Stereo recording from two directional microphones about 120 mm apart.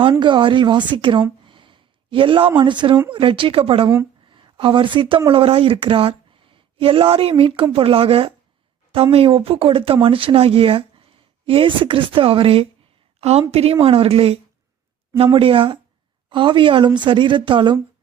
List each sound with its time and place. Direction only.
0.0 s a woman's voice: 45° right (ahead or behind)
13.1 s a sound: 60° right (ahead or behind)
13.5 s speech: 55° right (ahead or behind)